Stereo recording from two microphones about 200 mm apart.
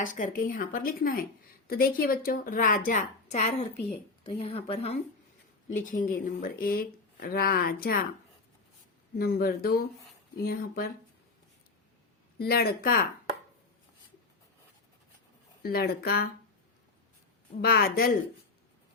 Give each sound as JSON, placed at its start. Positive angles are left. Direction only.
{"t": 0.0, "sound": "a woman's voice", "side_deg": 40}
{"t": 5.7, "sound": "a woman's voice", "side_deg": 45}
{"t": 9.1, "sound": "a woman's voice", "side_deg": 50}
{"t": 12.4, "sound": "a woman's voice", "side_deg": 50}
{"t": 15.6, "sound": "a woman's voice", "side_deg": 50}
{"t": 17.6, "sound": "a woman's voice", "side_deg": 50}